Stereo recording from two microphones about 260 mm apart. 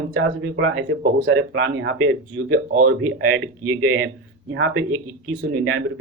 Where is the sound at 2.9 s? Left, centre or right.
Right.